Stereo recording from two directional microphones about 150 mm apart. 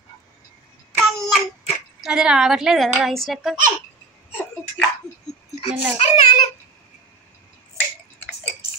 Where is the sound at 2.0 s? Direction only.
5° right (ahead or behind).